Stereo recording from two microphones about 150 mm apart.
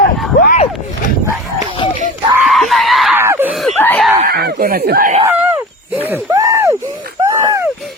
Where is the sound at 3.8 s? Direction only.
15° left (ahead or behind).